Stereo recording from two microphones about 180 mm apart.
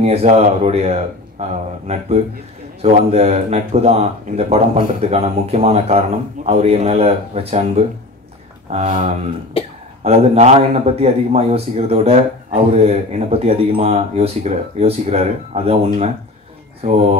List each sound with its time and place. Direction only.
0.0 s a man's voice: 35° right (ahead or behind)
2.8 s a man's voice: 35° right (ahead or behind)